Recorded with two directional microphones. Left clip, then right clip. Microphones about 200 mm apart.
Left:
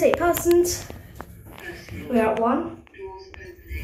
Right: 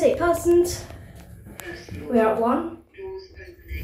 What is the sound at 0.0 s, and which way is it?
Speech, centre (ahead or behind).